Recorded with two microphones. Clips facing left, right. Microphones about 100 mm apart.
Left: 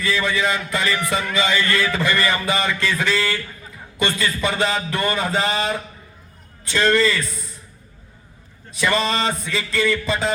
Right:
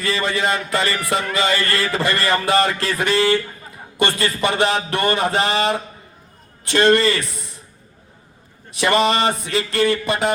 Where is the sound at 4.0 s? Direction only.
60° right (ahead or behind).